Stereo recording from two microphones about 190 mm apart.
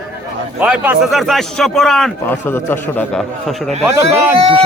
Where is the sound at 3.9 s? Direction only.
15° right (ahead or behind).